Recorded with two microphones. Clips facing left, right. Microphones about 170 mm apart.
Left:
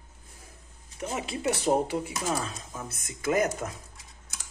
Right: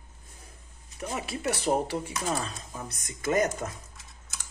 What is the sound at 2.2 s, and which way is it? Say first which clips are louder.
Speech: left 1 dB; 5° left (ahead or behind).